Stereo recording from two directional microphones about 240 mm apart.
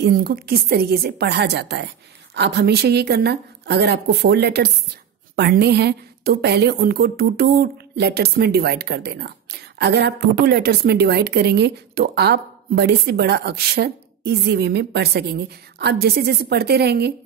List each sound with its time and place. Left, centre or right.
0.0 s a woman's voice: right